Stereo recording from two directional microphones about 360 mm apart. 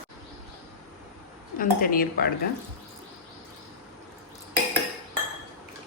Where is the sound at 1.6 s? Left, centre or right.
Left.